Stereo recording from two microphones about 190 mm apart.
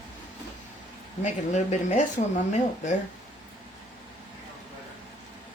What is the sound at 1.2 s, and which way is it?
Speech, 40° left (ahead or behind).